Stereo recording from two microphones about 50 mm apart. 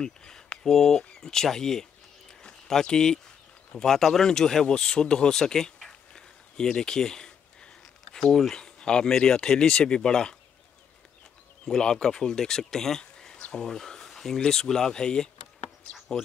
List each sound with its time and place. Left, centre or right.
0.0 s speech: centre
11.6 s speech: centre
15.8 s insect: left